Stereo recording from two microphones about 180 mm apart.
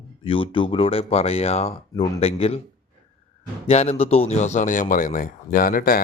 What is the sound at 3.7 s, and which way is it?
A man's voice, 35° left (ahead or behind).